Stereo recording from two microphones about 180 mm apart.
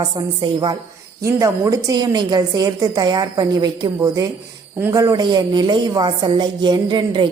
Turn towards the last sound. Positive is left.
turn(degrees=-25)  # may be behind; listen again after turning